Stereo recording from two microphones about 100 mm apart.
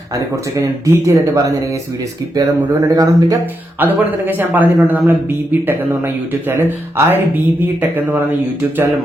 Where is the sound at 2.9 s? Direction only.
35° right (ahead or behind).